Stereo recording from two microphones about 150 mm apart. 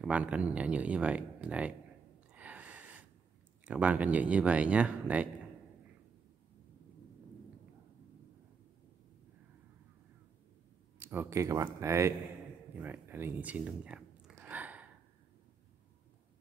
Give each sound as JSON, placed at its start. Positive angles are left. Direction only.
{"t": 0.0, "sound": "speech", "side_deg": -10}
{"t": 2.3, "sound": "a sound", "side_deg": -10}
{"t": 3.6, "sound": "speech", "side_deg": -10}
{"t": 11.0, "sound": "speech", "side_deg": -10}
{"t": 14.3, "sound": "gasp", "side_deg": -10}